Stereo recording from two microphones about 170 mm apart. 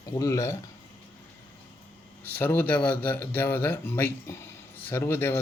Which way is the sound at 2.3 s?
10° left (ahead or behind).